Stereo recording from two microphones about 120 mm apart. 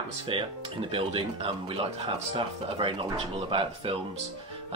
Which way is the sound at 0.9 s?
50° right (ahead or behind).